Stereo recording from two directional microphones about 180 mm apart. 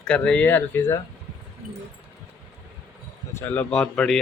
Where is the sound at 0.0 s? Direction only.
5° left (ahead or behind).